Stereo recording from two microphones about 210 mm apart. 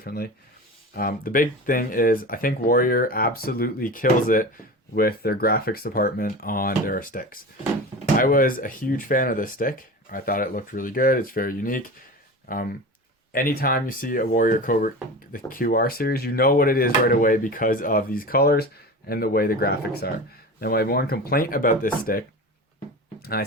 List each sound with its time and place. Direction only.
0.0 s speech: 45° left (ahead or behind)